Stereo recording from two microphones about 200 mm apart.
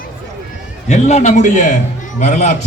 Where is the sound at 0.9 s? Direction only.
35° left (ahead or behind).